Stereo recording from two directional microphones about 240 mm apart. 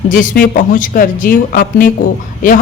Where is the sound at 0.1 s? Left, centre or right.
Left.